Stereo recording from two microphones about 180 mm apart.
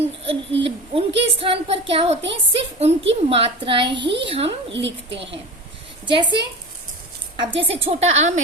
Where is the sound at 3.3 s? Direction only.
30° right (ahead or behind).